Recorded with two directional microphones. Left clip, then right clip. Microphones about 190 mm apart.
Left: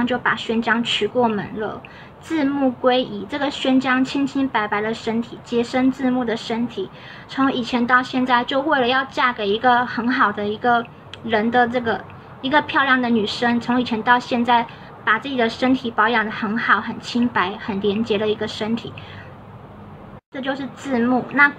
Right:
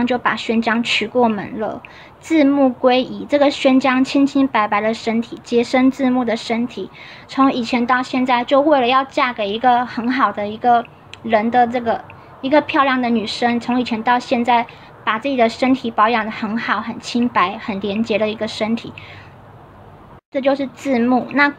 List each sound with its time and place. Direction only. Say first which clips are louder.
0.0 s a woman's voice: right 2 dB; 30° right (ahead or behind)
20.4 s a woman's voice: right 8 dB; 30° right (ahead or behind)